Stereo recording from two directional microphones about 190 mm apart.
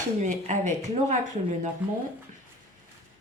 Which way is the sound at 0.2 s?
40° right (ahead or behind).